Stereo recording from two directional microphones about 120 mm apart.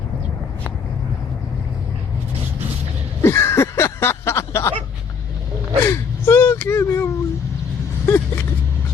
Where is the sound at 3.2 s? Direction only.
20° left (ahead or behind).